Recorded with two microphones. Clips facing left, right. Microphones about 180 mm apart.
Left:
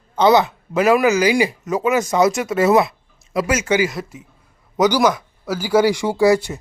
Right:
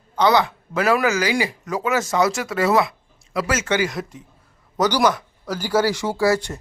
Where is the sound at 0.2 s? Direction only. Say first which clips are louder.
Left 4 dB; 20° left (ahead or behind).